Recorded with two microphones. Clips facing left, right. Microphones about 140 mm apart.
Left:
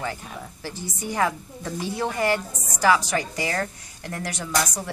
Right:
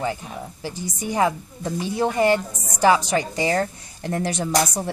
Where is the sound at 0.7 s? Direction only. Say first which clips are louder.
Right 3 dB; 20° right (ahead or behind).